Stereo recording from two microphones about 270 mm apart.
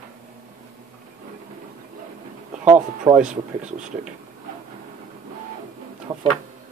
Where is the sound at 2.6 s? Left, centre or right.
Centre.